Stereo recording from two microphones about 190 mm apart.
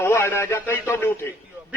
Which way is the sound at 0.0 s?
15° left (ahead or behind).